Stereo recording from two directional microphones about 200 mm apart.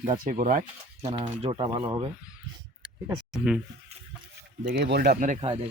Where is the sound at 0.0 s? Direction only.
40° right (ahead or behind).